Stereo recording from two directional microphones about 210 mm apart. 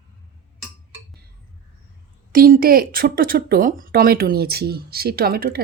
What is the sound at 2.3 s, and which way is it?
A woman's voice, 45° right (ahead or behind).